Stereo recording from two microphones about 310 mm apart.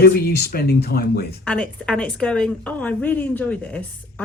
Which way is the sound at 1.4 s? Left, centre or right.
Centre.